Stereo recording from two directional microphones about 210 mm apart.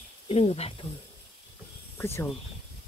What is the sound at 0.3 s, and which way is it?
Speech, 30° left (ahead or behind).